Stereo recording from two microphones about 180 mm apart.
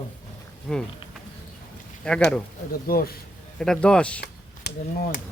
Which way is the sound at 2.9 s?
55° left (ahead or behind).